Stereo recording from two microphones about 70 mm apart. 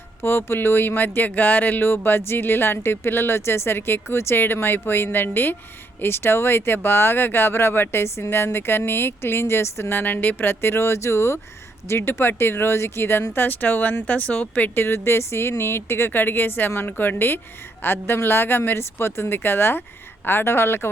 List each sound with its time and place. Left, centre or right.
0.2 s speech: left
10.0 s speech: left
14.8 s speech: left